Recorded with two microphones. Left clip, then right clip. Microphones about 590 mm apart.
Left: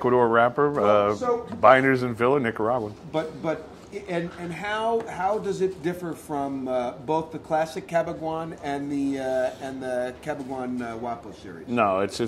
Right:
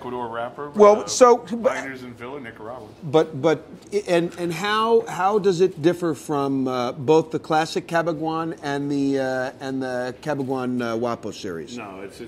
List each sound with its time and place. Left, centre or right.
0.0 s speech: left
1.6 s a man's voice: left
3.1 s a man's voice: right
11.7 s a man's voice: left